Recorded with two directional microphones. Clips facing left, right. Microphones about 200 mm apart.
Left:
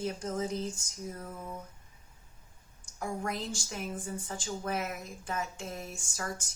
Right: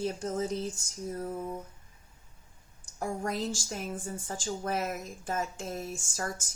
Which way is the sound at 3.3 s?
35° right (ahead or behind).